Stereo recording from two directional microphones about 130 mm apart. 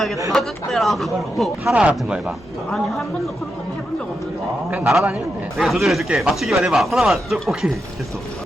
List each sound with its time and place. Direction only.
0.3 s a man's voice: centre (ahead or behind)
2.6 s a man's voice: 5° left (ahead or behind)
4.9 s a man's voice: 5° right (ahead or behind)